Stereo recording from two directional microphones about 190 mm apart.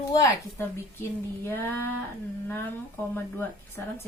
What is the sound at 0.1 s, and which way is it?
Speech, 15° left (ahead or behind).